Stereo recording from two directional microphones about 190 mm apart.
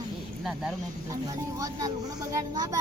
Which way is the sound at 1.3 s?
15° right (ahead or behind).